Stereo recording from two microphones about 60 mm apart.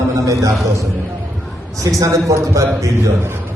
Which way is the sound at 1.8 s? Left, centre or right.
Right.